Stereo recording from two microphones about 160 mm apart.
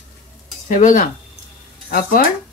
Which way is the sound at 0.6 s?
55° left (ahead or behind).